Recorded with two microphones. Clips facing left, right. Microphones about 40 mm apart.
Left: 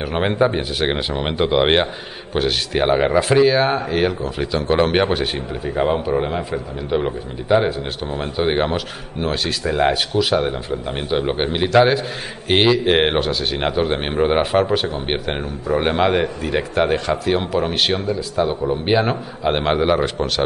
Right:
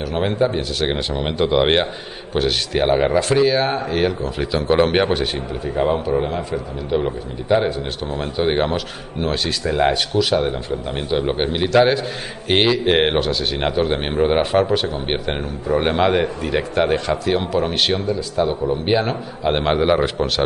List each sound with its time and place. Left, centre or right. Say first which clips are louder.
0.0 s a man's voice: left 1 dB; left; by 20.4 s centre